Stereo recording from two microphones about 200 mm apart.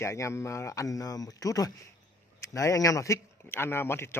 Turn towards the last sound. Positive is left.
turn(degrees=10)  # may be behind; listen again after turning